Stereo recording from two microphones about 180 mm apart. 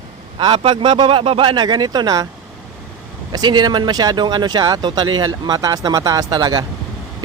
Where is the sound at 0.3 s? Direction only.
30° right (ahead or behind).